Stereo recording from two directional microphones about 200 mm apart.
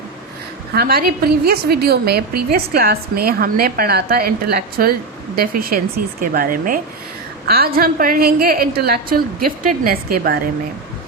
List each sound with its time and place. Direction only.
0.7 s a woman's voice: 50° right (ahead or behind)